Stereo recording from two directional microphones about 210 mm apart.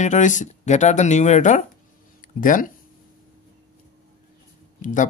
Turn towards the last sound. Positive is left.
turn(degrees=40)  # may be behind; listen again after turning